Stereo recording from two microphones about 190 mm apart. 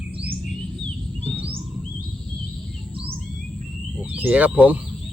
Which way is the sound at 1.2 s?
10° right (ahead or behind).